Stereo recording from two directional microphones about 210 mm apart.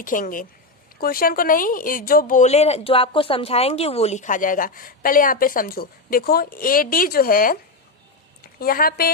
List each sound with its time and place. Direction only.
0.0 s a woman's voice: 40° left (ahead or behind)